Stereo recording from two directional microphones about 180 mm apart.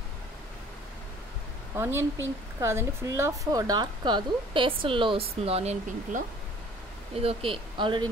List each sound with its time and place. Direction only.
1.8 s a woman's voice: 15° right (ahead or behind)